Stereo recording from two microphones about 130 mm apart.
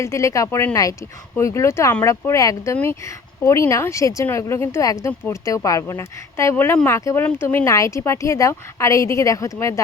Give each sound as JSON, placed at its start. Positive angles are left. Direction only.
{"t": 0.0, "sound": "a woman's voice", "side_deg": 20}